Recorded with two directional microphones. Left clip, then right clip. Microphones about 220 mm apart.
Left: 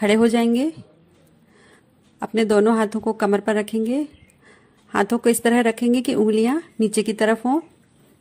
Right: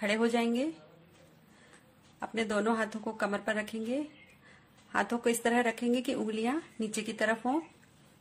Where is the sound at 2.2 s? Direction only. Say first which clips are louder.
Left 14 dB; 35° left (ahead or behind).